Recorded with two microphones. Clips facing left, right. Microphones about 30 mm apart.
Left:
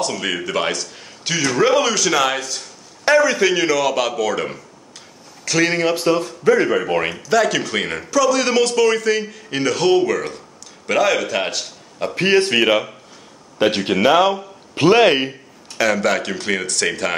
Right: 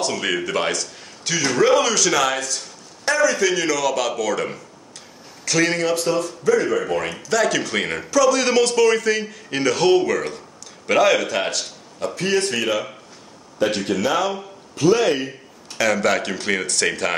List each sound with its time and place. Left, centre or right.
0.0 s a man's voice: centre; by 7.2 s left
7.2 s a man's voice: centre
12.2 s speech: left
14.8 s speech: left
15.8 s a man's voice: centre